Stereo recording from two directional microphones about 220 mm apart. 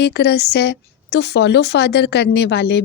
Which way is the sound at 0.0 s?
50° left (ahead or behind).